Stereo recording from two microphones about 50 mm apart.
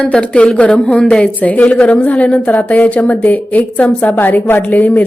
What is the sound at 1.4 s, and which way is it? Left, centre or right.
A woman's voice, left.